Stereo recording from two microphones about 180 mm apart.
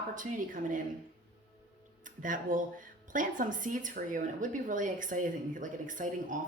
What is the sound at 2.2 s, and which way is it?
Speech, 45° right (ahead or behind).